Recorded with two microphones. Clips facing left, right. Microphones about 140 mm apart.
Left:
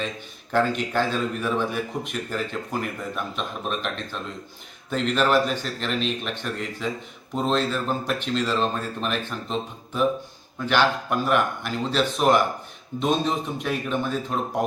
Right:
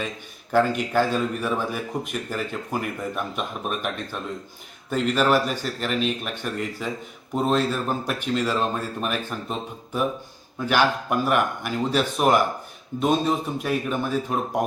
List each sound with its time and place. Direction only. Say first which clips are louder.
0.5 s speech: right 2 dB; 10° right (ahead or behind)